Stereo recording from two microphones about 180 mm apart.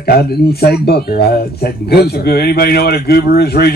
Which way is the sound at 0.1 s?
60° left (ahead or behind).